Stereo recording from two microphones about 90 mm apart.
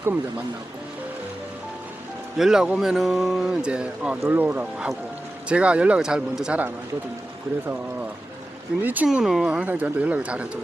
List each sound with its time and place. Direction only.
2.4 s speech: 5° right (ahead or behind)
8.8 s speech: 20° right (ahead or behind)
9.0 s speech: 5° right (ahead or behind)